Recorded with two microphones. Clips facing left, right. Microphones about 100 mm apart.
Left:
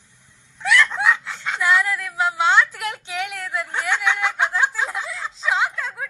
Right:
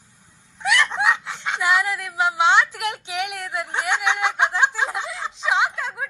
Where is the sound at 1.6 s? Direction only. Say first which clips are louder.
Left 1 dB; 15° right (ahead or behind).